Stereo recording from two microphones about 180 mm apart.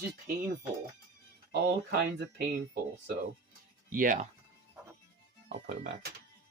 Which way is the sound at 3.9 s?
50° right (ahead or behind).